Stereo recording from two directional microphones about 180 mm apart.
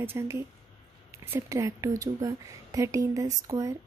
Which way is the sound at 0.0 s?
15° right (ahead or behind).